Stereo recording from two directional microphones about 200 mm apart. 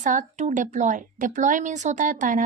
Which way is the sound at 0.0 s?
40° right (ahead or behind).